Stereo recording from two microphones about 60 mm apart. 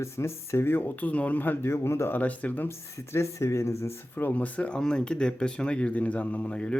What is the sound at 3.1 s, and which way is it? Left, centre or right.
Speech, left.